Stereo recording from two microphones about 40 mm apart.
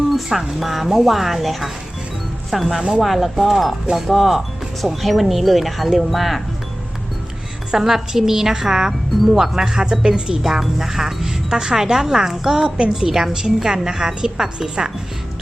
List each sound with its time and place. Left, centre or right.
0.3 s speech: centre
7.7 s speech: centre